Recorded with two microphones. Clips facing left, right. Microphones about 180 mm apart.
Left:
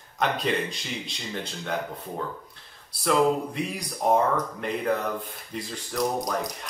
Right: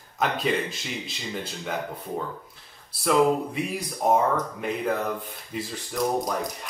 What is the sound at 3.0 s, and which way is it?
Speech, 5° right (ahead or behind).